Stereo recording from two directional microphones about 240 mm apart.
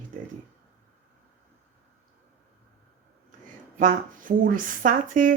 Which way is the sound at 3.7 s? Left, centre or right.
Right.